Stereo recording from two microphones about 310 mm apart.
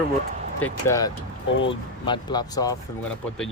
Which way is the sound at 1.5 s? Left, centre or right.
Left.